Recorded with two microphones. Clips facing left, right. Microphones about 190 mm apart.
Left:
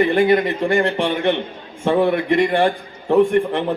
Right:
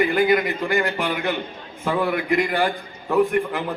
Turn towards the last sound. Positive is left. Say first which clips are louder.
# left 4 dB
turn(degrees=30)  # may be behind; listen again after turning